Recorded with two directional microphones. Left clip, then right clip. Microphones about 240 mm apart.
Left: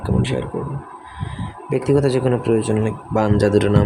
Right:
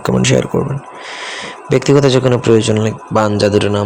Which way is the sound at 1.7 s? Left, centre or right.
Centre.